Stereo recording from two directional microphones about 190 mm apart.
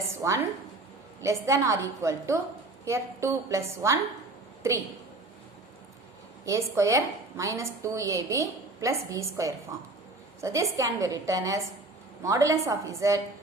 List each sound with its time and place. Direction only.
0.2 s a woman's voice: 15° right (ahead or behind)
6.4 s a woman's voice: 15° right (ahead or behind)